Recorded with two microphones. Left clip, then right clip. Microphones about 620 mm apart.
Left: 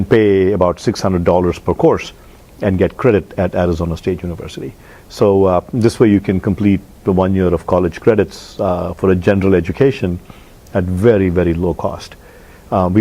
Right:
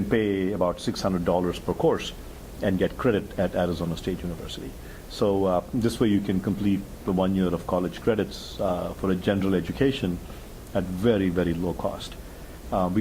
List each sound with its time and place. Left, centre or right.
0.1 s speech: left